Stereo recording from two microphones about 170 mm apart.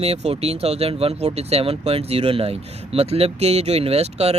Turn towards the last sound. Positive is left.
turn(degrees=-35)  # may be behind; listen again after turning